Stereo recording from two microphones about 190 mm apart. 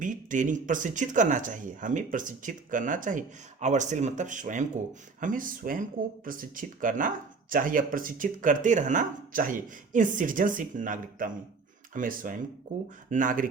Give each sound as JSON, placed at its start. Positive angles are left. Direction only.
{"t": 0.0, "sound": "speech", "side_deg": -45}